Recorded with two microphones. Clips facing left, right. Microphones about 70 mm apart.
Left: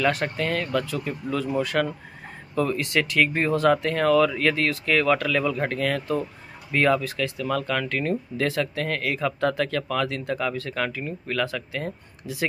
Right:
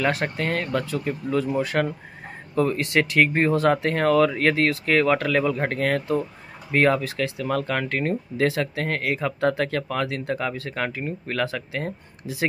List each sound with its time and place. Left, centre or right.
0.0 s speech: right